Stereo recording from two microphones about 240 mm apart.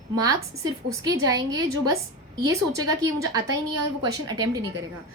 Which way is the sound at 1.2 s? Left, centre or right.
Centre.